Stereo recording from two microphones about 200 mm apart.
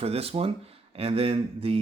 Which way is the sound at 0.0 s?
30° right (ahead or behind).